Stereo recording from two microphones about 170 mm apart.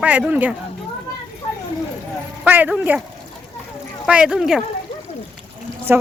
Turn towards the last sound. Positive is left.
turn(degrees=-10)  # may be behind; listen again after turning